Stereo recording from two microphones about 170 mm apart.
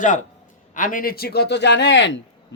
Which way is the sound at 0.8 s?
55° left (ahead or behind).